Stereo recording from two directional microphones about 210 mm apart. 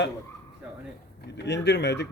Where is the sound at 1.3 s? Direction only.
55° left (ahead or behind).